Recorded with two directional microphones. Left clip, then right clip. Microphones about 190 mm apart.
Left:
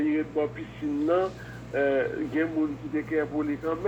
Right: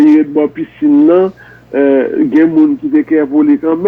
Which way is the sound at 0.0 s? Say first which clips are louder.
Right 18 dB; 35° right (ahead or behind).